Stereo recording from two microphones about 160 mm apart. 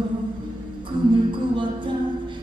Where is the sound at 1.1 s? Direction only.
30° right (ahead or behind).